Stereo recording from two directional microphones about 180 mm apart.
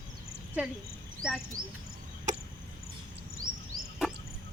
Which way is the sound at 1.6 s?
55° right (ahead or behind).